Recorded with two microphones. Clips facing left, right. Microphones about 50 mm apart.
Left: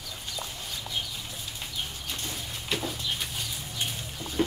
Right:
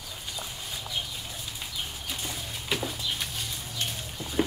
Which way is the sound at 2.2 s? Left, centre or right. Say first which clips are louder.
Even; centre.